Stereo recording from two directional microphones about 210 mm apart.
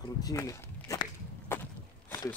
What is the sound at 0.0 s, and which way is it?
Speech, 15° left (ahead or behind).